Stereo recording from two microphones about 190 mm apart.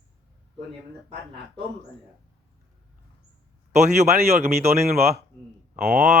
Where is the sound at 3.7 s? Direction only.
35° right (ahead or behind).